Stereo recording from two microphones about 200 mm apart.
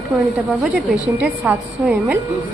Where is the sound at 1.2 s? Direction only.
5° right (ahead or behind).